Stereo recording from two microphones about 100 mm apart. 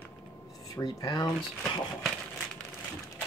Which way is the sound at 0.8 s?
45° left (ahead or behind).